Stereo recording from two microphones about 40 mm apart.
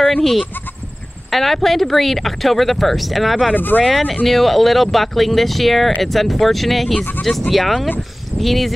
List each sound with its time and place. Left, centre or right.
1.3 s speech: centre
3.5 s speech: left
3.9 s speech: centre